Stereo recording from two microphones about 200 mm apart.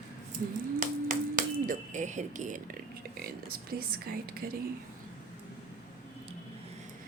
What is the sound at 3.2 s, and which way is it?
A woman's voice, 50° right (ahead or behind).